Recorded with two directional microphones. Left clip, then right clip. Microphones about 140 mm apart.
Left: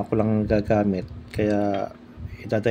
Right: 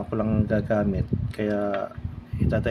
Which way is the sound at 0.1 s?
40° left (ahead or behind).